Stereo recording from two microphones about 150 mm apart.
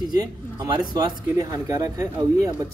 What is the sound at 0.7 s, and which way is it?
A man's voice, 30° right (ahead or behind).